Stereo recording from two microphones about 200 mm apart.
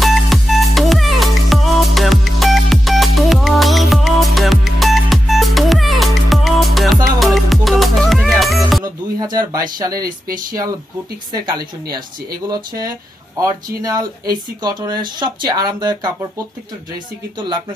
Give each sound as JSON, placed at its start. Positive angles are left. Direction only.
{"t": 0.0, "sound": "music", "side_deg": 0}
{"t": 9.2, "sound": "a sound", "side_deg": -20}
{"t": 9.9, "sound": "speech", "side_deg": -45}
{"t": 11.3, "sound": "speech", "side_deg": -20}